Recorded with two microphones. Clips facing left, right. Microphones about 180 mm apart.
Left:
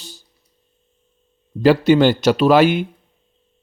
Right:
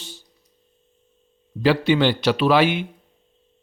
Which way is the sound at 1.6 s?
40° left (ahead or behind).